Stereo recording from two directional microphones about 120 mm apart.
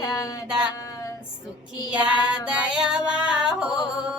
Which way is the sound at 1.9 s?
10° right (ahead or behind).